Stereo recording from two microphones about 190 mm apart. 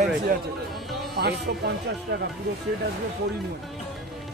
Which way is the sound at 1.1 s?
60° right (ahead or behind).